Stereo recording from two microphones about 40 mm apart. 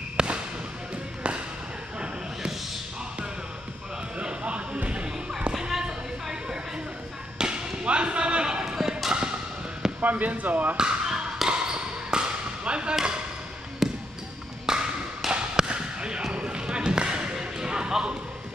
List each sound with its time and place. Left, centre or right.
0.2 s a sound: right
4.2 s music: right
5.5 s a sound: centre
7.3 s basketball bounce: right
10.0 s speech: right
10.8 s basketball bounce: centre
13.8 s basketball bounce: centre
14.7 s tap: centre
15.3 s basketball bounce: right